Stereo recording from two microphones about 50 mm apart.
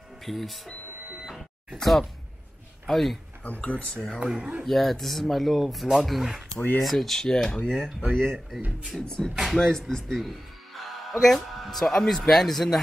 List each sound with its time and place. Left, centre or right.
0.2 s speech: centre
1.8 s speech: centre
3.4 s speech: left
3.9 s speech: centre
4.2 s speech: right
4.6 s speech: centre
8.9 s speech: centre
9.6 s speech: centre